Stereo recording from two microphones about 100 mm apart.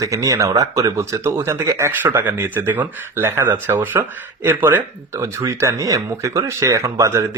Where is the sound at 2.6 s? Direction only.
20° right (ahead or behind).